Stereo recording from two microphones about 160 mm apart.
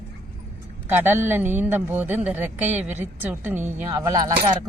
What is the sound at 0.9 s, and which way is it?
Speech, 15° right (ahead or behind).